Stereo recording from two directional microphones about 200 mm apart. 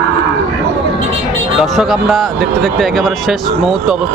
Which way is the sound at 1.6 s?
Centre (ahead or behind).